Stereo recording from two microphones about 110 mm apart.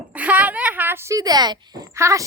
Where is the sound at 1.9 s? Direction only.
30° right (ahead or behind).